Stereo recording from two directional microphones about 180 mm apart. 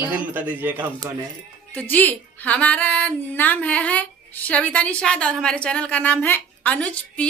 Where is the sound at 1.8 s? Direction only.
10° left (ahead or behind).